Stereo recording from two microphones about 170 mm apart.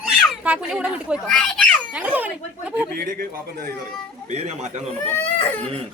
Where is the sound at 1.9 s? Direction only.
10° right (ahead or behind).